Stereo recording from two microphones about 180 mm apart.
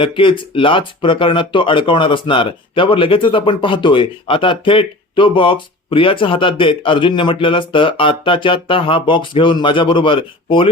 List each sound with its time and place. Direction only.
0.0 s speech: 30° left (ahead or behind)